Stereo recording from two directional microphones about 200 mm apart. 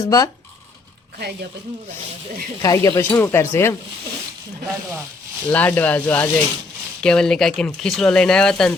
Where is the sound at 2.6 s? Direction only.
15° left (ahead or behind).